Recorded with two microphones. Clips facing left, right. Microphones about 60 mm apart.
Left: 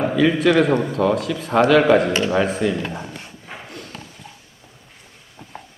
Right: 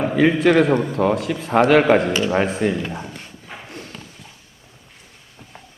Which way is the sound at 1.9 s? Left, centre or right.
Right.